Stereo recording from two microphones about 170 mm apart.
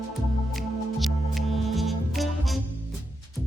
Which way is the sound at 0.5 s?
Centre (ahead or behind).